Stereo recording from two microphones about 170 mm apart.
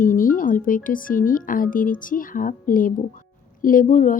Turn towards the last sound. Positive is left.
turn(degrees=50)  # may be behind; listen again after turning